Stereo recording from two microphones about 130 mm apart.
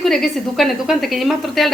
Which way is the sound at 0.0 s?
5° left (ahead or behind).